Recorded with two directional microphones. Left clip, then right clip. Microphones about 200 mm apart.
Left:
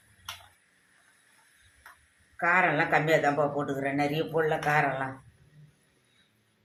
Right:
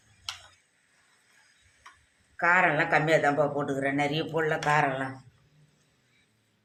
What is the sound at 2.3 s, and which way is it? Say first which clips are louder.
Speech: right 1 dB; 20° right (ahead or behind).